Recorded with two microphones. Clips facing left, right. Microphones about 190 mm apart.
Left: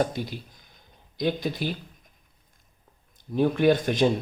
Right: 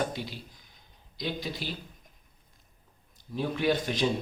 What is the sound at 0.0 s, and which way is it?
Speech, 45° left (ahead or behind).